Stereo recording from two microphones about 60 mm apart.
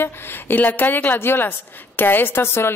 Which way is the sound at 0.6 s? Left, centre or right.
Left.